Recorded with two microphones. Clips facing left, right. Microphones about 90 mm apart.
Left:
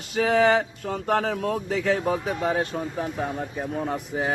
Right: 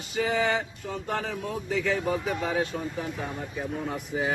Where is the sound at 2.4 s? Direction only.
45° left (ahead or behind).